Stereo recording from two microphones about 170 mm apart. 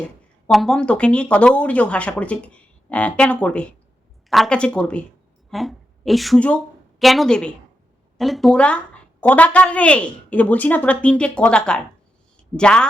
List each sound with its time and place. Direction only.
0.4 s a woman's voice: centre (ahead or behind)